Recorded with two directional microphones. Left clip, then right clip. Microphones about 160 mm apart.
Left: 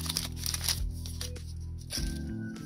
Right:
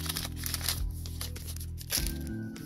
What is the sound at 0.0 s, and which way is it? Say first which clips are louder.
Music: left 2 dB; 15° left (ahead or behind).